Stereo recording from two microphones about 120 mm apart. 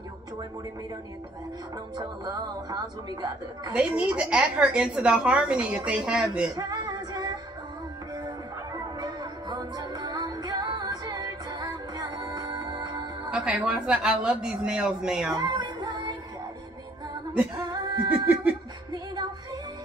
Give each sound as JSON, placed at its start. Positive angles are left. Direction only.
{"t": 2.0, "sound": "a woman's voice", "side_deg": -30}
{"t": 3.7, "sound": "a woman's voice", "side_deg": -10}
{"t": 6.5, "sound": "female singing", "side_deg": -35}
{"t": 9.0, "sound": "music", "side_deg": -35}
{"t": 13.3, "sound": "a woman's voice", "side_deg": -5}
{"t": 15.3, "sound": "music", "side_deg": -35}
{"t": 17.6, "sound": "a sound", "side_deg": -40}
{"t": 18.2, "sound": "a sound", "side_deg": -15}
{"t": 18.9, "sound": "music", "side_deg": -35}